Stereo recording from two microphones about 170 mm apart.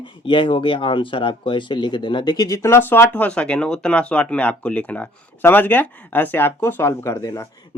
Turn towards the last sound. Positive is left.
turn(degrees=20)  # may be behind; listen again after turning